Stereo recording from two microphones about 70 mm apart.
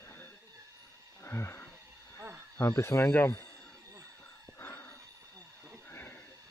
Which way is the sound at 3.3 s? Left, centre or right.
Left.